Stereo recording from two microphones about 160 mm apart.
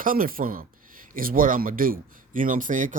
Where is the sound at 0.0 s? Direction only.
60° right (ahead or behind).